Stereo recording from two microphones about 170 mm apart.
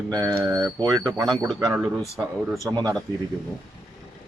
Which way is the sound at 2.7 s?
25° right (ahead or behind).